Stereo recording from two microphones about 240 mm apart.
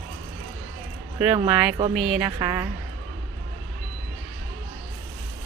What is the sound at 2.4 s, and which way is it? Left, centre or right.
Speech, centre.